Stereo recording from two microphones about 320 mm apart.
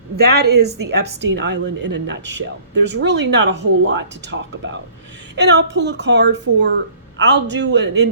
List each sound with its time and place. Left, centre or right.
0.2 s speech: right